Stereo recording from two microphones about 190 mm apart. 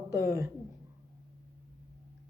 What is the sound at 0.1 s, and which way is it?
Speech, 15° right (ahead or behind).